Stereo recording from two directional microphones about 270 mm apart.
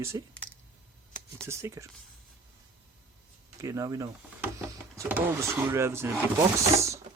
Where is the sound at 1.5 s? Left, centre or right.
Centre.